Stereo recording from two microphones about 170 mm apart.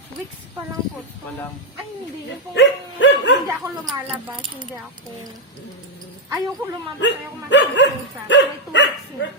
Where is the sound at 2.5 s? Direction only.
90° left.